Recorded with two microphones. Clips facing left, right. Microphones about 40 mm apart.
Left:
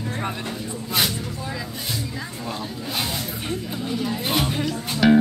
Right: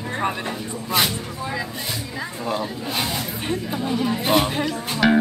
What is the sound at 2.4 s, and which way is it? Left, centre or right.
Speech, centre.